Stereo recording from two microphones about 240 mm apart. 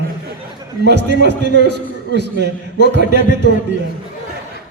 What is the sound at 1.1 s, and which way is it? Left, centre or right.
A man's voice, right.